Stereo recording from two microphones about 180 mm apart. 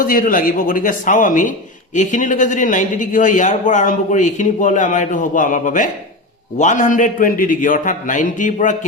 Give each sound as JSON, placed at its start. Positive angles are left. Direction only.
{"t": 0.0, "sound": "a man's voice", "side_deg": 50}